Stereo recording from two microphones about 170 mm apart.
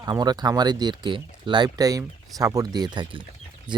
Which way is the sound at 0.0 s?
20° right (ahead or behind).